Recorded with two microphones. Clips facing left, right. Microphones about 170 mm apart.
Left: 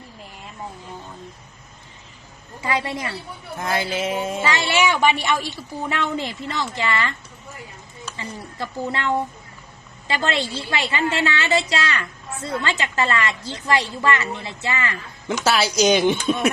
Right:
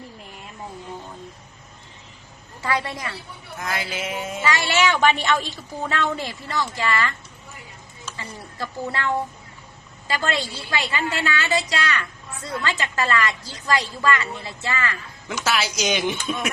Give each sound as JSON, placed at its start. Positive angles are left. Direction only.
{"t": 2.6, "sound": "a woman's voice", "side_deg": 20}
{"t": 4.8, "sound": "a woman's voice", "side_deg": 10}
{"t": 8.1, "sound": "a woman's voice", "side_deg": 25}
{"t": 15.3, "sound": "speech", "side_deg": 30}